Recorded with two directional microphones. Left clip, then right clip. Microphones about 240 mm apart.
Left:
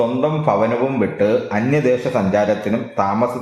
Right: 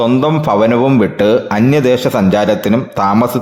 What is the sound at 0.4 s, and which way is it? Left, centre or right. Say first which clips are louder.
A man's voice: right 5 dB; right.